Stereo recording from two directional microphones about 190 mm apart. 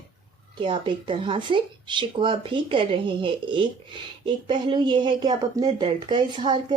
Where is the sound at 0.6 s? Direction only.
25° right (ahead or behind).